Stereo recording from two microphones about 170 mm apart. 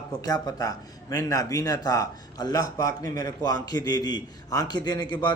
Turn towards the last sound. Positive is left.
turn(degrees=25)  # may be behind; listen again after turning